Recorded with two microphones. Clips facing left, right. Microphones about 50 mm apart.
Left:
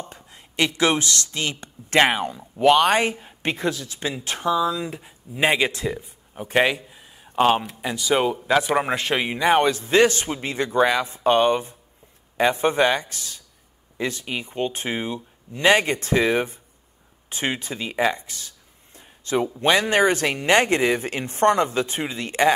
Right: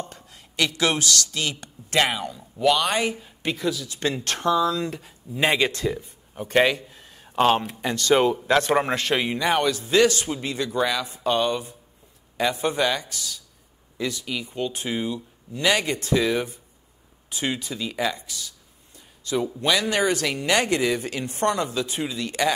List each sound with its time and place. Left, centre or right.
0.0 s speech: left
4.0 s speech: centre
7.0 s a sound: centre
7.3 s a man's voice: centre
9.4 s speech: left
18.9 s a sound: left
19.6 s speech: left